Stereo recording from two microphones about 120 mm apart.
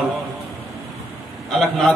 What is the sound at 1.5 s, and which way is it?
Speech, 5° left (ahead or behind).